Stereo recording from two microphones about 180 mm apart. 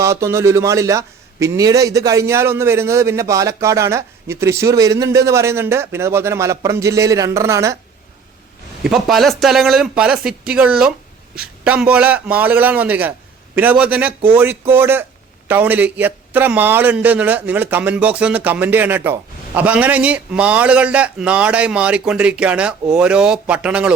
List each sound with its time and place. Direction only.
0.0 s a man's voice: 15° right (ahead or behind)
8.8 s a man's voice: centre (ahead or behind)